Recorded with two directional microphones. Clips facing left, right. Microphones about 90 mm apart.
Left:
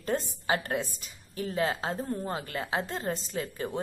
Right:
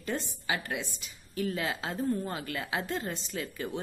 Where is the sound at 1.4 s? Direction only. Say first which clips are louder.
Left 3 dB; 30° left (ahead or behind).